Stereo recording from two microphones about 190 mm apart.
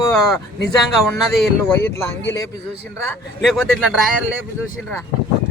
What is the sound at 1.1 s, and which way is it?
Speech, 5° left (ahead or behind).